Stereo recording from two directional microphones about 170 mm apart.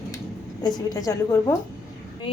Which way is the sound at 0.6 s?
25° left (ahead or behind).